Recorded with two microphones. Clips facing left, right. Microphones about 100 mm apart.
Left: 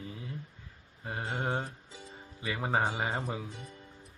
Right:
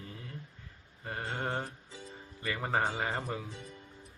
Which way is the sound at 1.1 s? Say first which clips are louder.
Left 2 dB; 15° left (ahead or behind).